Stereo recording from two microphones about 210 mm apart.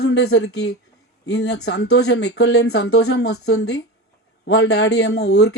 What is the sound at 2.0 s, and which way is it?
Speech, 90° left.